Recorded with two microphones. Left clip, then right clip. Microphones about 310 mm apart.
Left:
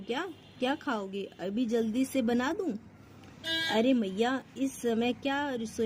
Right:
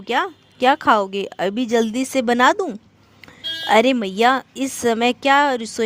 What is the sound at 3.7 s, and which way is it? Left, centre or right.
Speech, right.